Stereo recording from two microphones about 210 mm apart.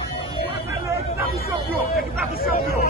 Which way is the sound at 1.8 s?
45° left (ahead or behind).